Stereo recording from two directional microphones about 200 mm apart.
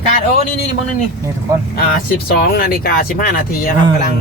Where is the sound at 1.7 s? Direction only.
50° left (ahead or behind).